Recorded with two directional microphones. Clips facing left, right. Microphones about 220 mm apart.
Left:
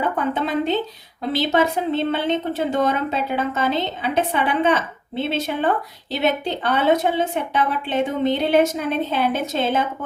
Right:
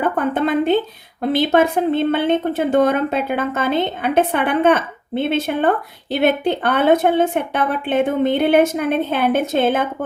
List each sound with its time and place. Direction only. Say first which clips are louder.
0.3 s speech: right 5 dB; 55° right (ahead or behind)